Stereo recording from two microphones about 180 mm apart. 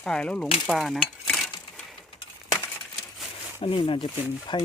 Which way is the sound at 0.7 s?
Centre (ahead or behind).